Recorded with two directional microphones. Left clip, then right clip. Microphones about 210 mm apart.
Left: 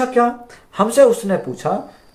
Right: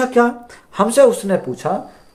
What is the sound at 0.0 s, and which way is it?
Speech, 45° right (ahead or behind).